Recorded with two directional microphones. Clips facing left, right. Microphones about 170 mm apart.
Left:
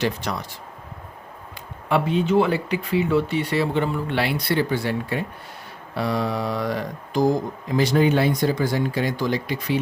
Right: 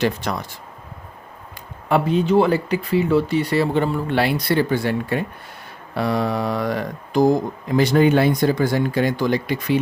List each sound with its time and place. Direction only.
0.0 s speech: 50° right (ahead or behind)
1.9 s speech: 40° right (ahead or behind)